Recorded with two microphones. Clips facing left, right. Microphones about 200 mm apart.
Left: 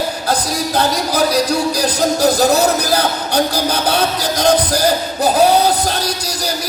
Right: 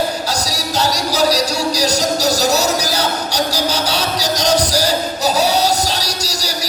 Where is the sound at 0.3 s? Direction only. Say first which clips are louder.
Left 4 dB; 55° left (ahead or behind).